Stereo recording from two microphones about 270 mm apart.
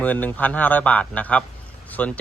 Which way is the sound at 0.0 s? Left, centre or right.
Centre.